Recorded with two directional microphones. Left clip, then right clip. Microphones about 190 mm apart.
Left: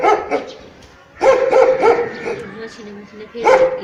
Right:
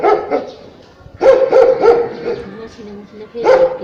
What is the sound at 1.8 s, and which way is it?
Dog, 40° right (ahead or behind).